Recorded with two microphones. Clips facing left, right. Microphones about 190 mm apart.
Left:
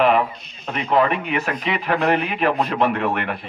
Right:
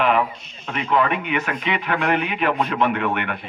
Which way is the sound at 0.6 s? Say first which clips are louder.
Left 2 dB; 35° left (ahead or behind).